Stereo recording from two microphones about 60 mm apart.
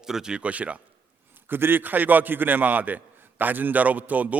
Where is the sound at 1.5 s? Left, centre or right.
Right.